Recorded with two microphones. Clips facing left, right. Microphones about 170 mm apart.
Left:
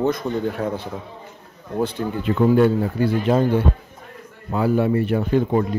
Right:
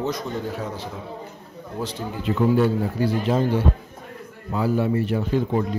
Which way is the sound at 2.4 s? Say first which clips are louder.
Left 3 dB; 55° left (ahead or behind).